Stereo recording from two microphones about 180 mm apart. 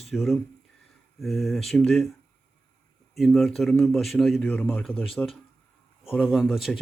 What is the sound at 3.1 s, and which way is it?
Speech, centre (ahead or behind).